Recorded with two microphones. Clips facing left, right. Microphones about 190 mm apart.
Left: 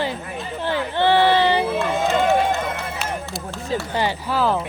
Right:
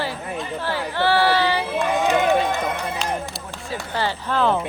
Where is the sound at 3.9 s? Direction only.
15° left (ahead or behind).